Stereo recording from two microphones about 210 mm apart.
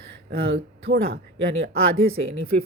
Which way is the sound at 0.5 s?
50° right (ahead or behind).